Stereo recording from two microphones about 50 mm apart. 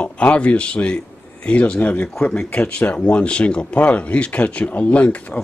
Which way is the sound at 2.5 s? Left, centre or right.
Left.